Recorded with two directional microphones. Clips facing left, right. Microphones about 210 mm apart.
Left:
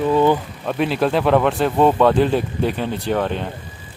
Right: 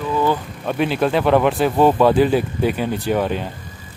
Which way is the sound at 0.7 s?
Centre (ahead or behind).